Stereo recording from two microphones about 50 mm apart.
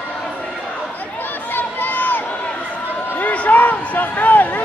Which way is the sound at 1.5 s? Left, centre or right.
Left.